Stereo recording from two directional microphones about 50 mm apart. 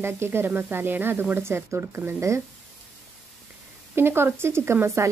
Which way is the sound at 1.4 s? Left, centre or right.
Right.